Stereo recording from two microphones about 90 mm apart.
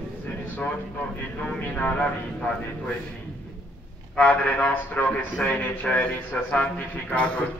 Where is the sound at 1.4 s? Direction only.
15° left (ahead or behind).